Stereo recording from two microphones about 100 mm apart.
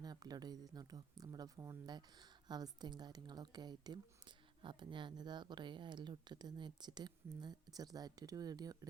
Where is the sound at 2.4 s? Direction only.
45° right (ahead or behind).